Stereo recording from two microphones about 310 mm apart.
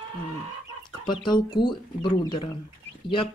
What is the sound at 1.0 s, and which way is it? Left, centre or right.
Speech, centre.